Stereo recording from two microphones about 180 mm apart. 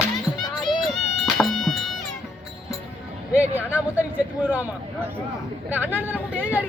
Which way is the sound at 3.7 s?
10° right (ahead or behind).